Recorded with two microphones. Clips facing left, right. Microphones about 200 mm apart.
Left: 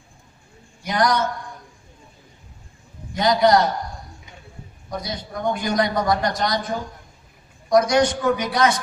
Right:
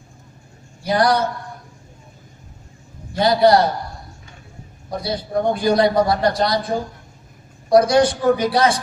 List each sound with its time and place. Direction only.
0.8 s a man's voice: 30° right (ahead or behind)
3.2 s a man's voice: 30° right (ahead or behind)
4.9 s a man's voice: 30° right (ahead or behind)